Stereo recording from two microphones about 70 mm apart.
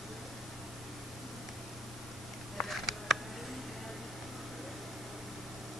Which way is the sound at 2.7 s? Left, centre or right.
Centre.